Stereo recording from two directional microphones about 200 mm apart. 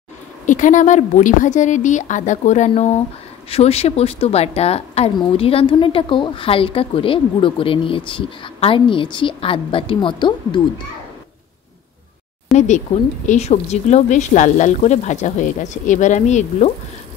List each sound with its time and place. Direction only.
0.5 s a woman's voice: 40° left (ahead or behind); by 10.6 s 25° left (ahead or behind)
12.5 s speech: 35° left (ahead or behind)